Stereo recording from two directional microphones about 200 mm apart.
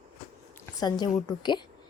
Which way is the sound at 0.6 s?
20° left (ahead or behind).